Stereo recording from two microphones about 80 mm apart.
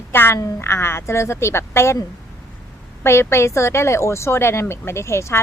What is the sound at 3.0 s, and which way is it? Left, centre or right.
A woman's voice, left.